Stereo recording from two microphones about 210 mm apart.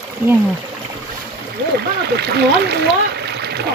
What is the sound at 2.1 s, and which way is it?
Speech, 50° right (ahead or behind).